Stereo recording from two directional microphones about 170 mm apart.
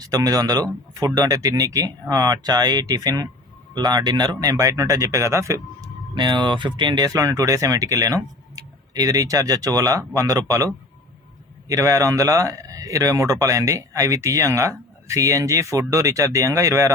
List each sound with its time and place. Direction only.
0.0 s speech: 20° right (ahead or behind)
11.7 s speech: 20° right (ahead or behind)